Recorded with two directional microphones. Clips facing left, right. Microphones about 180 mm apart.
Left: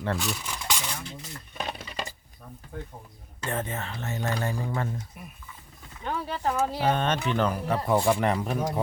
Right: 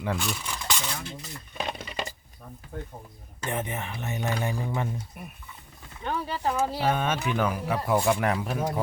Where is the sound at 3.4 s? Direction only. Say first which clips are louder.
Even; 15° right (ahead or behind).